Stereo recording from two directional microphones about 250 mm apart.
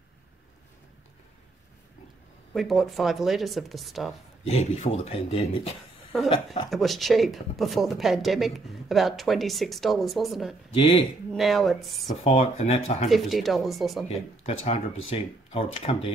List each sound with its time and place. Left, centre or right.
2.5 s speech: centre
4.5 s speech: left
6.7 s speech: centre
10.7 s speech: centre
11.3 s speech: centre
12.2 s speech: left
13.1 s speech: centre
14.0 s speech: left